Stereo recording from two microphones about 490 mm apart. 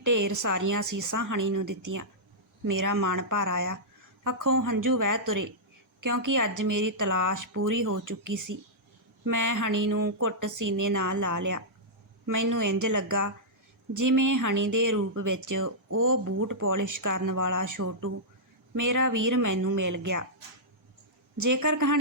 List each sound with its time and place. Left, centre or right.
0.0 s speech: right
21.3 s speech: right